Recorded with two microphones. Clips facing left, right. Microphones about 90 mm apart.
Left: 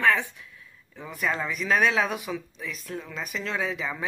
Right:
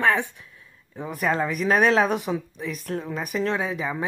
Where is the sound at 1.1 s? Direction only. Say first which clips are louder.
Right 5 dB; 40° right (ahead or behind).